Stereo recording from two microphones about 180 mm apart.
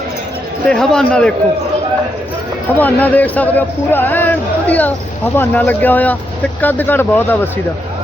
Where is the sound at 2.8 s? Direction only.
10° left (ahead or behind).